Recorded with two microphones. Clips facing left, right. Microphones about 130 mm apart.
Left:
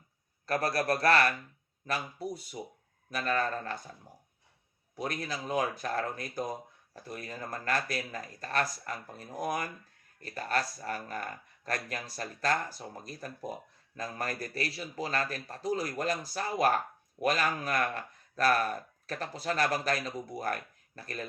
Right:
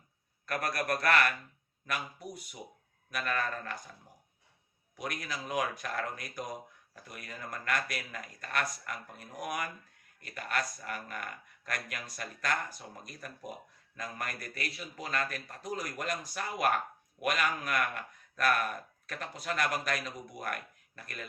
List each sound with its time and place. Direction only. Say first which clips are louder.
0.4 s speech: left 4 dB; 30° left (ahead or behind)
4.9 s speech: left 3 dB; 30° left (ahead or behind)